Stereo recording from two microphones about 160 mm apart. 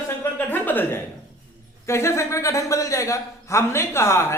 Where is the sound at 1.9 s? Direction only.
15° left (ahead or behind).